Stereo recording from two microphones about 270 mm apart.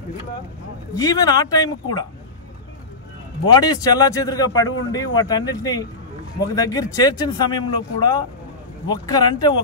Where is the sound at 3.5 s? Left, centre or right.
Centre.